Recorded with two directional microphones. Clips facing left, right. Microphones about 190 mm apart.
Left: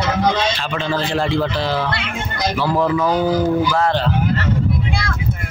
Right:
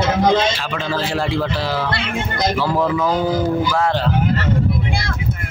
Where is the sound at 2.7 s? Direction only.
Centre (ahead or behind).